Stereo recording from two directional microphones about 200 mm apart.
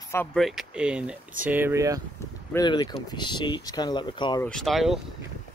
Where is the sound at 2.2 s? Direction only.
20° left (ahead or behind).